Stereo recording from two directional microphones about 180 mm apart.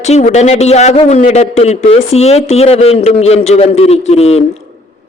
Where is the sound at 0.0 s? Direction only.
40° left (ahead or behind).